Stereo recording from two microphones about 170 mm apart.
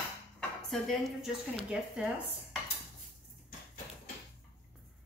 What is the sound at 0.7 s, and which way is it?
A woman's voice, centre (ahead or behind).